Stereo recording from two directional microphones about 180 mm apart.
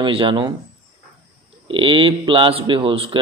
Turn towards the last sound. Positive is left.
turn(degrees=-30)  # may be behind; listen again after turning